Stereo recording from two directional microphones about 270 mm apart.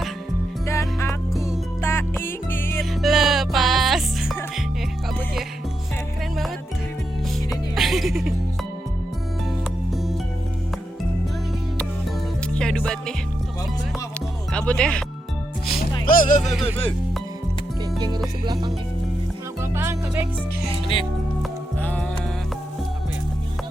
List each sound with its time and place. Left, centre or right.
0.7 s music: centre
7.5 s music: centre
12.5 s music: centre
14.7 s music: centre
16.0 s music: left
18.4 s music: centre
19.7 s music: centre
21.8 s music: centre